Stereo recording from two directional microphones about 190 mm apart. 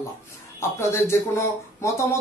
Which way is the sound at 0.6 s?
15° left (ahead or behind).